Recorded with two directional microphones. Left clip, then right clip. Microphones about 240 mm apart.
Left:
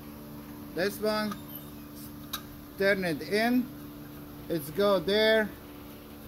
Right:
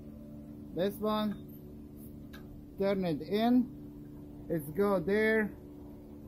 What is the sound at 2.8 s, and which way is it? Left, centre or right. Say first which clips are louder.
Speech: left 5 dB; centre.